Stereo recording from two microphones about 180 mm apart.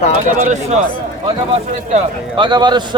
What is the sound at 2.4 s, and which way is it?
Speech, 25° right (ahead or behind).